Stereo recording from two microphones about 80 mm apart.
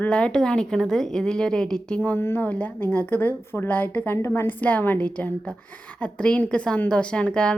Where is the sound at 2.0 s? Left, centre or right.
Left.